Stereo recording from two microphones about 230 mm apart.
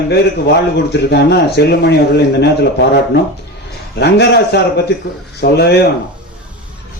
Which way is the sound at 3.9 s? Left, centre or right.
Left.